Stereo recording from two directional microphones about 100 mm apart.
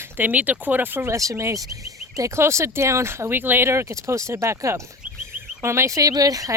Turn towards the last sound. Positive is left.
turn(degrees=-35)  # may be behind; listen again after turning